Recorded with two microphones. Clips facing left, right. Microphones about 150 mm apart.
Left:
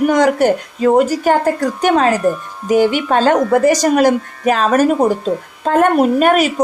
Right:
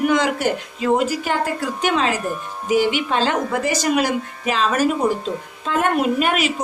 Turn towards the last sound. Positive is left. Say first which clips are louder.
# left 7 dB
turn(degrees=45)  # may be behind; listen again after turning